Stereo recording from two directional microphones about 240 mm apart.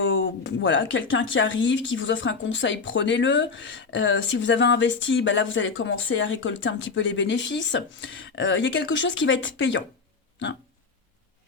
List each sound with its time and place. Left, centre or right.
0.0 s speech: left